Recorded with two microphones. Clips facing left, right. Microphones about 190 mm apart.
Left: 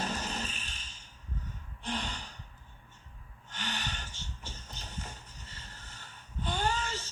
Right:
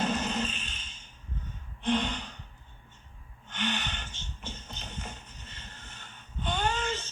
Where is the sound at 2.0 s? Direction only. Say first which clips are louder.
Right 6 dB; 65° right (ahead or behind).